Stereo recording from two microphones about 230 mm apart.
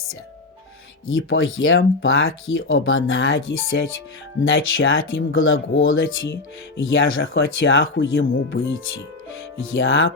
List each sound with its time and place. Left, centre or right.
1.0 s speech: left